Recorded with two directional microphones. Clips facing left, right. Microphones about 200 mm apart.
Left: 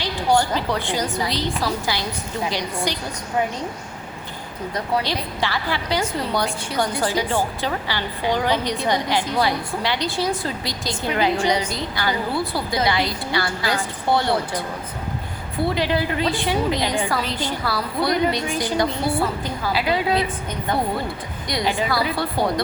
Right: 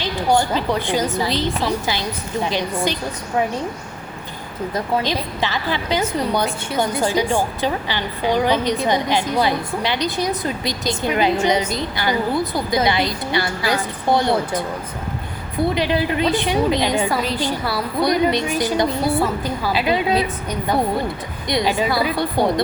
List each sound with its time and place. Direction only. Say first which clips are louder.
0.0 s a woman's voice: right 1 dB; 20° right (ahead or behind)
5.0 s a woman's voice: right 2 dB; 20° right (ahead or behind)
15.7 s a woman's voice: right 1 dB; 20° right (ahead or behind)
21.4 s a woman's voice: right 4 dB; 20° right (ahead or behind)